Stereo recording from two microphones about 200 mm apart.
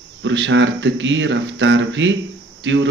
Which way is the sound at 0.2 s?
65° right (ahead or behind).